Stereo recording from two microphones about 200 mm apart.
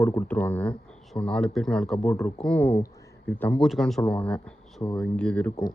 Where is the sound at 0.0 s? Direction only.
10° left (ahead or behind).